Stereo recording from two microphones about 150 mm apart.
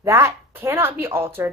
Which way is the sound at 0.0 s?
20° right (ahead or behind).